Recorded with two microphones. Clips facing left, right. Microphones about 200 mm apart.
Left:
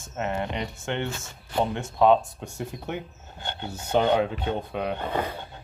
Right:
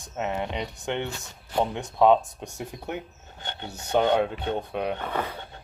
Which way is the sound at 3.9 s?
5° left (ahead or behind).